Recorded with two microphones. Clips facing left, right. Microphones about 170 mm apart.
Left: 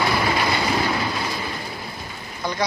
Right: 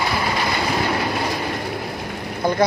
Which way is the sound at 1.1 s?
60° right (ahead or behind).